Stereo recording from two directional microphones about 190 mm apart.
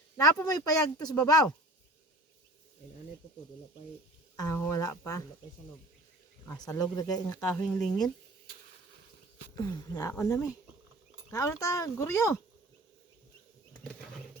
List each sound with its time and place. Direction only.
0.2 s speech: 20° left (ahead or behind)
4.4 s speech: 20° left (ahead or behind)
6.5 s speech: 20° left (ahead or behind)
9.6 s speech: 20° left (ahead or behind)